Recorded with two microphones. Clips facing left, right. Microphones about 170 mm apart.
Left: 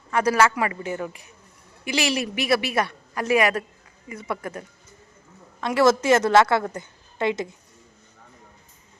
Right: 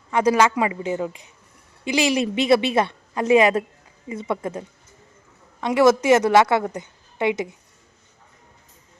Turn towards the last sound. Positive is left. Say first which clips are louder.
# right 2 dB
turn(degrees=-15)  # may be behind; listen again after turning